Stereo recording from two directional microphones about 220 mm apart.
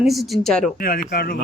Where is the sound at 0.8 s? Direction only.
40° left (ahead or behind).